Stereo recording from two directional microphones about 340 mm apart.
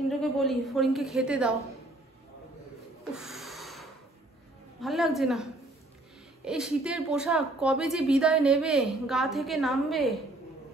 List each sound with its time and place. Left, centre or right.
0.2 s a woman's voice: centre
3.1 s snort: centre
4.7 s a woman's voice: centre